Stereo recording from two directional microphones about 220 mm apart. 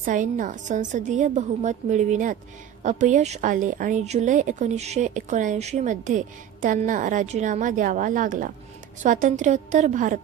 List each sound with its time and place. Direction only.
0.0 s a woman's voice: 35° right (ahead or behind)